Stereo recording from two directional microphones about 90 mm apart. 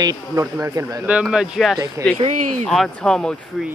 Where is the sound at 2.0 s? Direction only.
30° right (ahead or behind).